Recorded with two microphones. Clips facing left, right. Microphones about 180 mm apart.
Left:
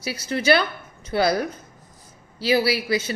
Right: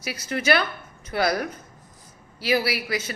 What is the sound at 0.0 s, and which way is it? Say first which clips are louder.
A woman's voice: left 3 dB; 30° left (ahead or behind).